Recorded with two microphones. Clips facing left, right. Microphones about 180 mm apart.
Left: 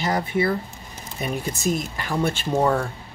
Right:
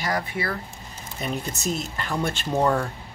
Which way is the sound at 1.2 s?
10° left (ahead or behind).